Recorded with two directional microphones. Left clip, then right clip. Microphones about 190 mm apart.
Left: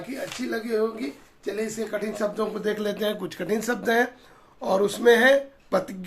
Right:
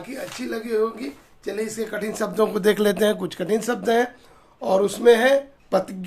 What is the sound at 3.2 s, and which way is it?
Speech, 25° right (ahead or behind).